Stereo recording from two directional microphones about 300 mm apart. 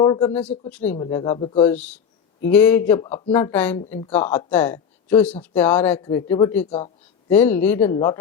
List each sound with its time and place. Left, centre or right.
0.0 s speech: centre
0.9 s speech: centre
1.7 s speech: centre
6.7 s a man's voice: centre
7.3 s speech: centre